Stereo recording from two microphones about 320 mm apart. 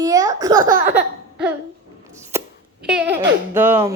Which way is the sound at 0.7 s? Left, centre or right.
Right.